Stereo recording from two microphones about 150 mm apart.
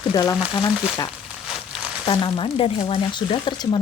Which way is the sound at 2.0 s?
35° left (ahead or behind).